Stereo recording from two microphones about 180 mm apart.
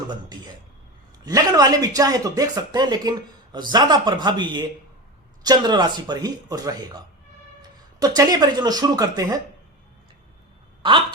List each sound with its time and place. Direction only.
0.1 s a man's voice: 25° right (ahead or behind)